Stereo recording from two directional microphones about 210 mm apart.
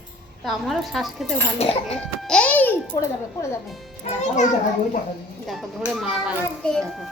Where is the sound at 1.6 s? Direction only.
30° left (ahead or behind).